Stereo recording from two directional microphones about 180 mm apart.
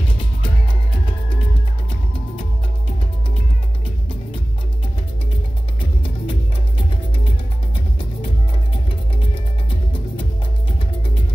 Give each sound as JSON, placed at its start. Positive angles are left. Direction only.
{"t": 5.8, "sound": "music", "side_deg": 30}
{"t": 9.3, "sound": "music", "side_deg": 30}